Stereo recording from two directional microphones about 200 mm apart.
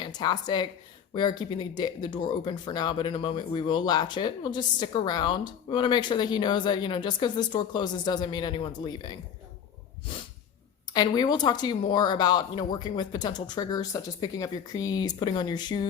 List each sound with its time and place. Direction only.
0.0 s speech: 20° left (ahead or behind)
10.9 s speech: 20° left (ahead or behind)